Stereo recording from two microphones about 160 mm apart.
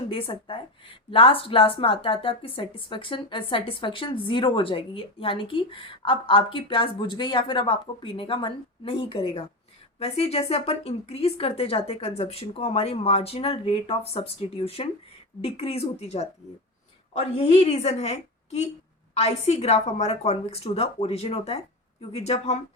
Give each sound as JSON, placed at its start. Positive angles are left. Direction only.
{"t": 0.1, "sound": "a woman's voice", "side_deg": 35}